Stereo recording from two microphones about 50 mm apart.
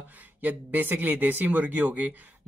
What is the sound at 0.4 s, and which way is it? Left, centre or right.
Speech, right.